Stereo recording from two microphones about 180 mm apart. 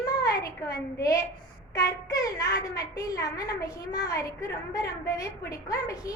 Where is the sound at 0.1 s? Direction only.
20° left (ahead or behind).